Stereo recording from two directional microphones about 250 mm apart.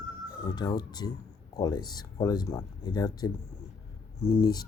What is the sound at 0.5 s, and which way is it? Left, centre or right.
Speech, centre.